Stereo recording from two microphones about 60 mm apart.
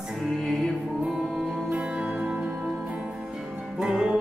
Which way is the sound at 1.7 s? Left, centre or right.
Right.